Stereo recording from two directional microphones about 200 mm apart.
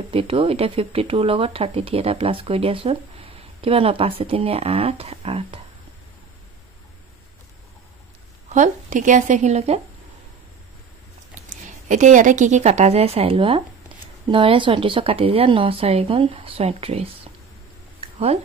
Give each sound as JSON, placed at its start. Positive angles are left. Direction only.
{"t": 0.1, "sound": "speech", "side_deg": -30}
{"t": 8.5, "sound": "a woman's voice", "side_deg": -40}
{"t": 11.6, "sound": "a woman's voice", "side_deg": -40}